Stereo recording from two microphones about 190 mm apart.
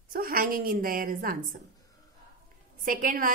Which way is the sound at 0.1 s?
50° right (ahead or behind).